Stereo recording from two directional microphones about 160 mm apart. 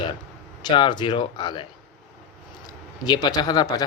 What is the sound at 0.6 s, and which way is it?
A man's voice, 30° left (ahead or behind).